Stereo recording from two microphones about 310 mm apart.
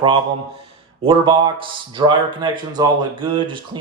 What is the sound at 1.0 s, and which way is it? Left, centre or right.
Speech, centre.